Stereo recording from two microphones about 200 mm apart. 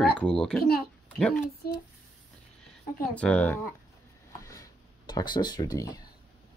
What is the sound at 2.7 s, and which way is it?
Speech, 5° left (ahead or behind).